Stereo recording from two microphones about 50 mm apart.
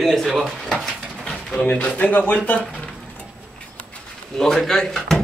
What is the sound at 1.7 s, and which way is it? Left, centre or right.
Speech, left.